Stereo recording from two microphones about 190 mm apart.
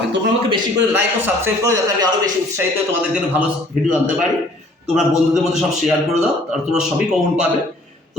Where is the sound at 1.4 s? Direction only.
15° right (ahead or behind).